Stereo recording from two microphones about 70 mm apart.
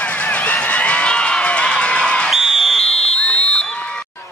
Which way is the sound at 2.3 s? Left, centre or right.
Centre.